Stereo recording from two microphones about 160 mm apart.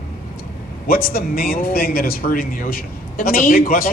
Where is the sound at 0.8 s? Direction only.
65° left (ahead or behind).